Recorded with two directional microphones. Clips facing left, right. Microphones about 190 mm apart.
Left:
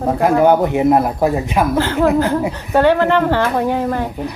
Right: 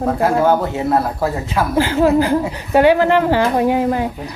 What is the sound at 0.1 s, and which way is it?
Speech, 20° left (ahead or behind).